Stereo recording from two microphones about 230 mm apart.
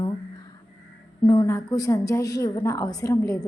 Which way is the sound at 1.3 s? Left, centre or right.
Centre.